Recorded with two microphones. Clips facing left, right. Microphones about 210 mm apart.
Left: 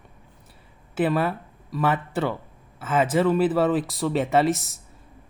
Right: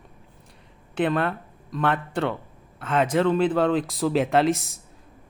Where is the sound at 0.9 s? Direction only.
5° left (ahead or behind).